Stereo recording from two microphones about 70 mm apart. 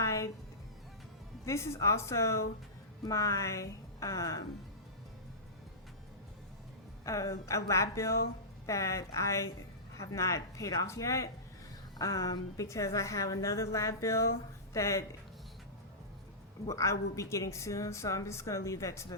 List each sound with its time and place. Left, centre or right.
0.0 s music: left
1.5 s a woman's voice: left
7.0 s a woman's voice: left
16.6 s a woman's voice: left